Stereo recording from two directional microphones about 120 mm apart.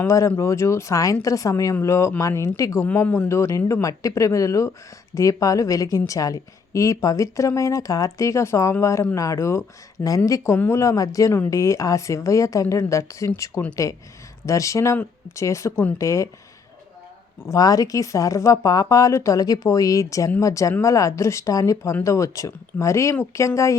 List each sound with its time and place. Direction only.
0.0 s a woman's voice: 25° left (ahead or behind)
15.7 s speech: 15° left (ahead or behind)
16.0 s a woman's voice: 25° left (ahead or behind)
17.4 s a woman's voice: 30° left (ahead or behind)